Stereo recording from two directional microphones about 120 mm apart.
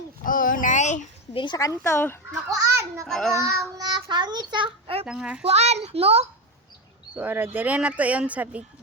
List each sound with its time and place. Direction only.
0.6 s a sound: 85° left
1.3 s speech: 45° left (ahead or behind)
1.8 s speech: 20° left (ahead or behind)
2.5 s a child's voice: 25° right (ahead or behind)
3.1 s a child's voice: 5° left (ahead or behind)
3.3 s child singing: 25° right (ahead or behind)
3.8 s a child's voice: 35° right (ahead or behind)
5.0 s speech: 10° right (ahead or behind)
5.5 s a child's voice: 65° right (ahead or behind)
7.2 s speech: 15° right (ahead or behind)